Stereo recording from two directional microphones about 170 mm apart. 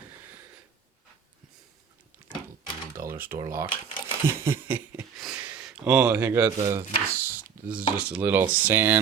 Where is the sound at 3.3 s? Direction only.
15° right (ahead or behind).